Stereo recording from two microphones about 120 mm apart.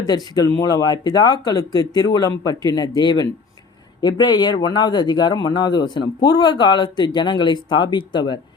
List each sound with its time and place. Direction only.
0.1 s speech: 35° left (ahead or behind)